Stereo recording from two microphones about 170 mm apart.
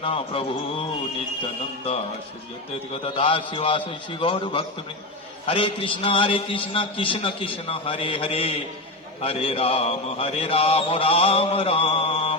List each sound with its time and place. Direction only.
0.0 s mantra: 30° left (ahead or behind)
3.2 s mantra: 30° left (ahead or behind)